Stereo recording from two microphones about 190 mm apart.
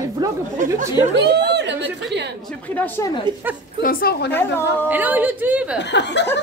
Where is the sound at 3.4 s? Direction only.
10° right (ahead or behind).